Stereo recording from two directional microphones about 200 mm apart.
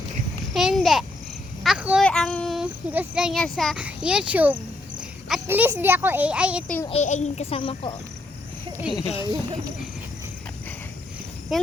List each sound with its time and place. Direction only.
0.5 s a child's voice: centre (ahead or behind)
1.6 s cricket: 5° right (ahead or behind)
2.0 s a child's voice: 5° left (ahead or behind)
6.9 s a child's voice: 35° left (ahead or behind)
9.2 s speech: 20° right (ahead or behind)
11.5 s speech: centre (ahead or behind)